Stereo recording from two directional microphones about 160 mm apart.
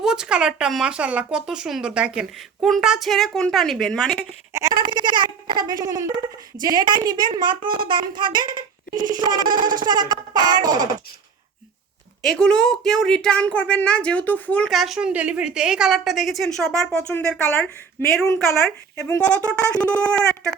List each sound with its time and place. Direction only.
0.0 s speech: 5° right (ahead or behind)
4.5 s a child's voice: 30° right (ahead or behind)
9.6 s a sound: 60° right (ahead or behind)
9.8 s a child's voice: 25° right (ahead or behind)
12.2 s a woman's voice: 5° left (ahead or behind)
18.3 s speech: centre (ahead or behind)